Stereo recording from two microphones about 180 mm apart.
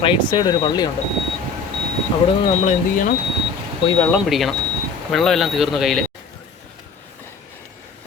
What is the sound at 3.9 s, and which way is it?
Speech, 5° left (ahead or behind).